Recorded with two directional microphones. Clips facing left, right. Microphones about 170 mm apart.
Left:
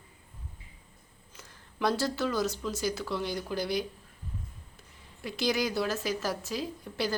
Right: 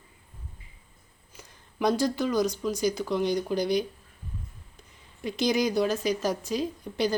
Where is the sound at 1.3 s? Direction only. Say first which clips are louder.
Right 6 dB; 15° right (ahead or behind).